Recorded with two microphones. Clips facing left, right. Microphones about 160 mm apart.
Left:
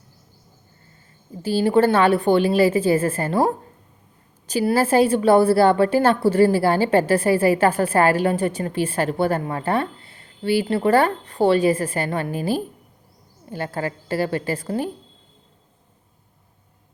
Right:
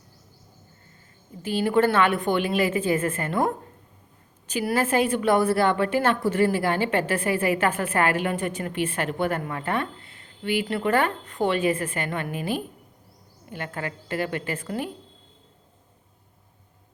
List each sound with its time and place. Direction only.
1.4 s a woman's voice: 30° left (ahead or behind)